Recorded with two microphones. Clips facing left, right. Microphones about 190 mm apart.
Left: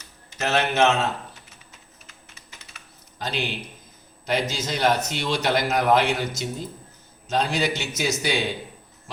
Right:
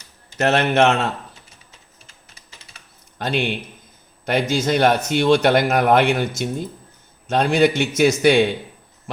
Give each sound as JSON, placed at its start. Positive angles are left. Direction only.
{"t": 0.3, "sound": "a man's voice", "side_deg": -60}
{"t": 3.2, "sound": "a man's voice", "side_deg": -60}